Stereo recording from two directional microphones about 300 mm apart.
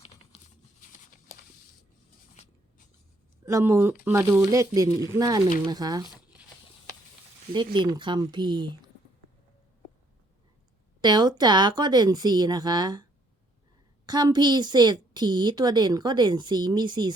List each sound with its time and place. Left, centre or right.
0.0 s a sound: centre
3.4 s a woman's voice: centre
7.5 s a woman's voice: centre
11.0 s a woman's voice: centre
14.1 s a woman's voice: centre